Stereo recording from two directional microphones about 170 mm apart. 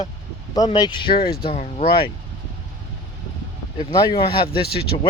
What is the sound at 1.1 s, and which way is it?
Speech, 65° left (ahead or behind).